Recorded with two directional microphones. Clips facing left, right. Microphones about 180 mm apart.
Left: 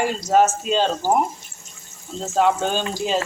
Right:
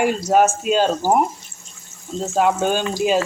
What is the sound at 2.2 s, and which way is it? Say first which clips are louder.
Speech: right 1 dB; 10° right (ahead or behind).